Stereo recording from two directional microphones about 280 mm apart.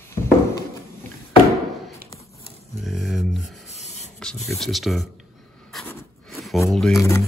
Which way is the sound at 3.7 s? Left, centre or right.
Left.